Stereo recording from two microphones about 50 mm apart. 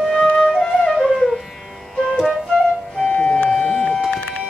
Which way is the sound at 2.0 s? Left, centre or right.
Centre.